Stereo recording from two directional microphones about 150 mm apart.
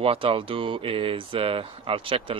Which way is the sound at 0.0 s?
40° right (ahead or behind).